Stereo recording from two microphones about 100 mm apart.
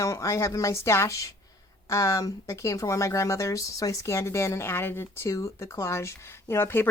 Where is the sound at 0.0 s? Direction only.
30° left (ahead or behind).